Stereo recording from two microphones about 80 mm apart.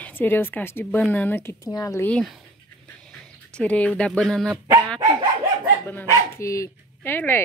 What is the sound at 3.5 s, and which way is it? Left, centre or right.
Speech, centre.